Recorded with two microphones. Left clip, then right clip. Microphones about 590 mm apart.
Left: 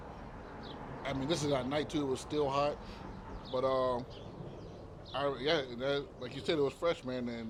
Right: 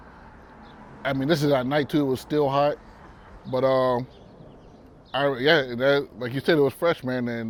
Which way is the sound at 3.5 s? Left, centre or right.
Right.